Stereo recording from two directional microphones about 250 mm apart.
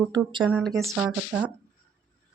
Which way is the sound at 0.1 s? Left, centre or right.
Centre.